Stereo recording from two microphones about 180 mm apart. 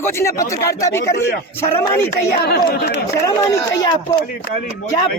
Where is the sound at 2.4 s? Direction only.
60° left (ahead or behind).